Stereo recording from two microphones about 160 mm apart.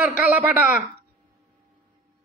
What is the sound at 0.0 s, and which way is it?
Speech, 10° right (ahead or behind).